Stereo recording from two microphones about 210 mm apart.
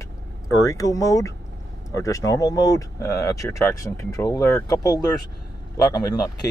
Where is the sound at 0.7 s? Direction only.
15° left (ahead or behind).